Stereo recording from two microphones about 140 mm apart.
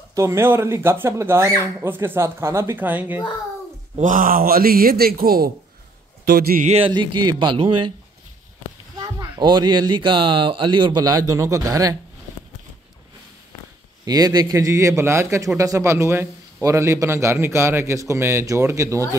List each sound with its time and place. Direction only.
0.1 s a man's voice: 20° right (ahead or behind)
4.0 s a man's voice: 75° right (ahead or behind); by 6.7 s 90° right
6.9 s speech: 35° right (ahead or behind)
8.9 s speech: 25° right (ahead or behind)
14.0 s a man's voice: 25° right (ahead or behind)